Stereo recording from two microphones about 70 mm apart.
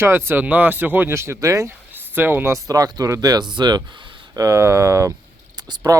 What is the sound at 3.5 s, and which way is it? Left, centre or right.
Speech, right.